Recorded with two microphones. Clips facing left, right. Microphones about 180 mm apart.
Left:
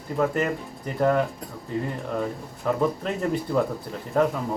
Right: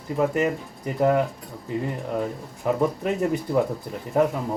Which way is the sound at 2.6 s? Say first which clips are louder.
Right 1 dB; 10° right (ahead or behind).